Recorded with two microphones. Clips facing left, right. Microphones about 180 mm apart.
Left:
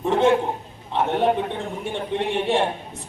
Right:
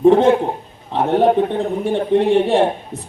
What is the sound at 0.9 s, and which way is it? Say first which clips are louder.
A man's voice: right 6 dB; 50° right (ahead or behind).